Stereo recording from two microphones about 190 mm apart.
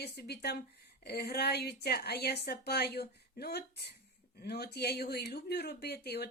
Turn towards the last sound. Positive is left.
turn(degrees=60)  # may be behind; listen again after turning